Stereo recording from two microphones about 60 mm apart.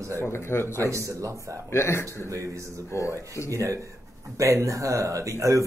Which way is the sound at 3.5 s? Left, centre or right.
Right.